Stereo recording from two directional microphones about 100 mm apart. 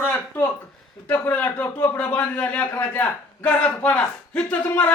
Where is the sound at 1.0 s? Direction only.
15° left (ahead or behind).